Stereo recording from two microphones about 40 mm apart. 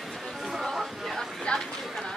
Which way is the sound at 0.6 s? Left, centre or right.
Centre.